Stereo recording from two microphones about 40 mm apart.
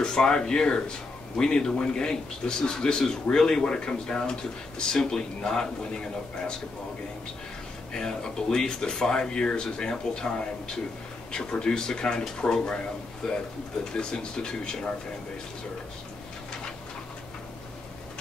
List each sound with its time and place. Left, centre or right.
0.0 s speech: centre
7.9 s speech: centre